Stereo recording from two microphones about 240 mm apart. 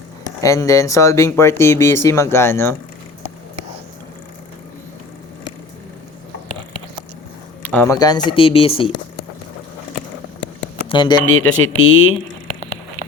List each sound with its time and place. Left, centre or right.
0.4 s speech: centre
7.6 s speech: centre; by 8.9 s left
10.8 s speech: centre
11.3 s speech: left